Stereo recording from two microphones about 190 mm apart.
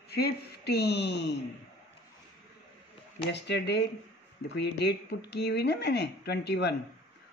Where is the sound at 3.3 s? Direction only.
60° left (ahead or behind).